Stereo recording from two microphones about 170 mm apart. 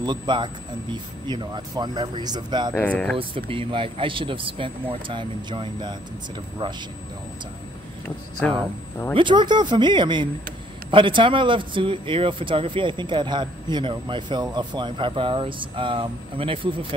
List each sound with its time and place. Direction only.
0.0 s speech: 25° right (ahead or behind)
2.7 s speech: 10° left (ahead or behind)
3.2 s a man's voice: 30° right (ahead or behind)
9.1 s speech: 30° right (ahead or behind)